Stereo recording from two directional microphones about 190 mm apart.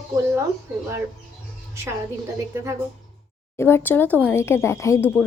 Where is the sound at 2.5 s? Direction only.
15° right (ahead or behind).